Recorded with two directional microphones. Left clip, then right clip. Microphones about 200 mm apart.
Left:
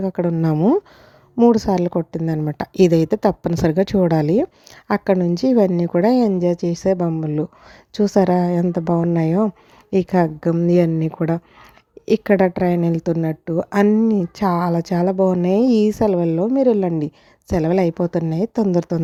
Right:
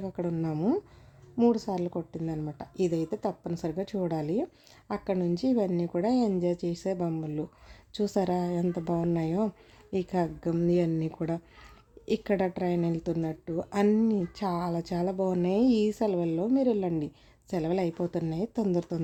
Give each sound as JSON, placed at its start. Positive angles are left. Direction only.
{"t": 0.0, "sound": "a woman's voice", "side_deg": 40}